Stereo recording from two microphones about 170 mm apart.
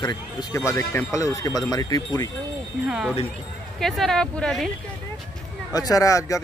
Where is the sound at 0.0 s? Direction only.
25° left (ahead or behind).